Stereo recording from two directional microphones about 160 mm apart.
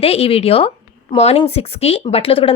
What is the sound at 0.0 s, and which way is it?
Speech, 40° left (ahead or behind).